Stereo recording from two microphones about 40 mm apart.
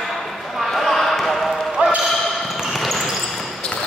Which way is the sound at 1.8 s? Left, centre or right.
Right.